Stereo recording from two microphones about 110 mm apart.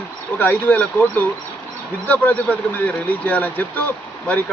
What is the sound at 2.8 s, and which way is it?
Speech, 15° left (ahead or behind).